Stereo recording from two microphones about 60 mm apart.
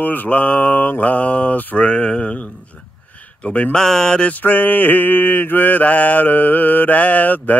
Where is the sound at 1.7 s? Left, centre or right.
Centre.